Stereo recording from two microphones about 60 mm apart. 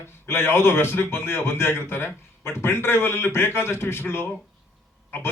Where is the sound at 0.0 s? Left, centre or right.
Left.